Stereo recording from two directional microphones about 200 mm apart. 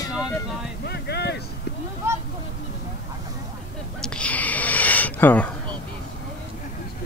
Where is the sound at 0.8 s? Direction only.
55° left (ahead or behind).